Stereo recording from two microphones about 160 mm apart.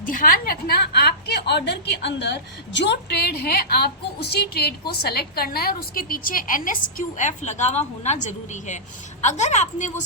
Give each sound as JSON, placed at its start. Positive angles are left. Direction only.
{"t": 0.0, "sound": "a woman's voice", "side_deg": 60}